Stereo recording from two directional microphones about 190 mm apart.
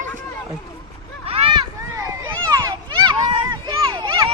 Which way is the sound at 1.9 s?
15° right (ahead or behind).